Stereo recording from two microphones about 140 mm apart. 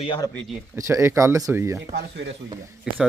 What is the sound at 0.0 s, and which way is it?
Speech, 35° left (ahead or behind).